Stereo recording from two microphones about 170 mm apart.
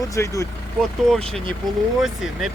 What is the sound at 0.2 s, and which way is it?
Speech, 15° left (ahead or behind).